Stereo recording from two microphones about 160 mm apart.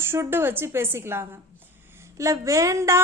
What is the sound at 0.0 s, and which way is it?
A woman's voice, 15° right (ahead or behind).